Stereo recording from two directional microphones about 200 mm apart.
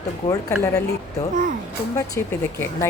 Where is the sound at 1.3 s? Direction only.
40° right (ahead or behind).